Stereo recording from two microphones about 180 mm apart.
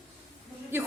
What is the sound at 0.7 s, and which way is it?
Speech, 15° right (ahead or behind).